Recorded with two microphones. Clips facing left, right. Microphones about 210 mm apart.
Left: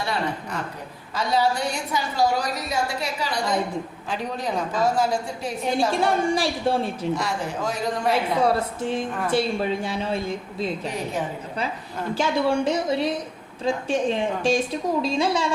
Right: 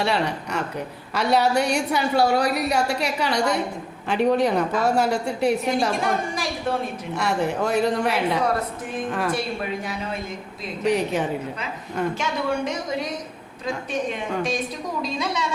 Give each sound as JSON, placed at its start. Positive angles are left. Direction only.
{"t": 0.0, "sound": "a woman's voice", "side_deg": -75}
{"t": 6.0, "sound": "a woman's voice", "side_deg": 30}
{"t": 7.2, "sound": "a woman's voice", "side_deg": -65}
{"t": 8.8, "sound": "a woman's voice", "side_deg": 30}
{"t": 10.8, "sound": "a woman's voice", "side_deg": -75}
{"t": 12.1, "sound": "a woman's voice", "side_deg": 30}